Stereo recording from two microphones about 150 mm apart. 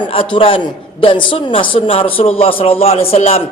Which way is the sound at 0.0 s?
40° left (ahead or behind).